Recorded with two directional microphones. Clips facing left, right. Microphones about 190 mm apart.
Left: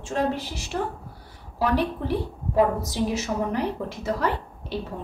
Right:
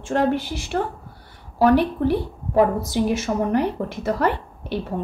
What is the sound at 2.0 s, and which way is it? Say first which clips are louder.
A woman's voice: right 6 dB; 55° right (ahead or behind).